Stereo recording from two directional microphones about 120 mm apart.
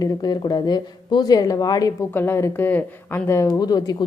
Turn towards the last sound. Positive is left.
turn(degrees=35)  # may be behind; listen again after turning